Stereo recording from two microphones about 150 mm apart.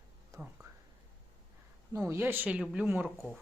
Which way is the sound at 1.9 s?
20° right (ahead or behind).